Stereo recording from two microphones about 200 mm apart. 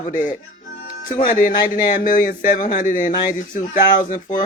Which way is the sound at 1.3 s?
40° left (ahead or behind).